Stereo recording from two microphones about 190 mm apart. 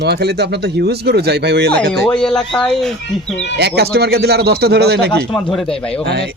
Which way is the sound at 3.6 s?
60° right (ahead or behind).